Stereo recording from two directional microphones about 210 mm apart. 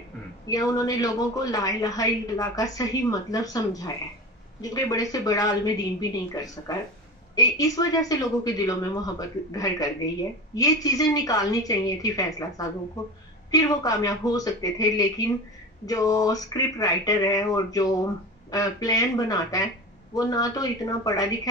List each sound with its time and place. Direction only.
0.5 s a woman's voice: 15° left (ahead or behind)